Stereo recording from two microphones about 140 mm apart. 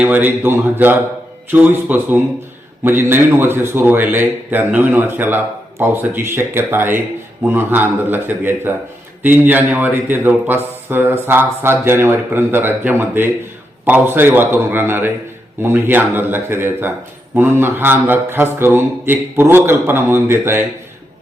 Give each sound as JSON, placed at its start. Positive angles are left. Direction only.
{"t": 0.0, "sound": "a man's voice", "side_deg": -10}